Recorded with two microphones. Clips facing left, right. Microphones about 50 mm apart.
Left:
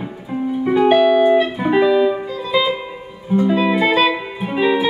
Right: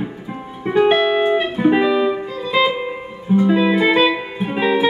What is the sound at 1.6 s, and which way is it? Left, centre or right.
Music, centre.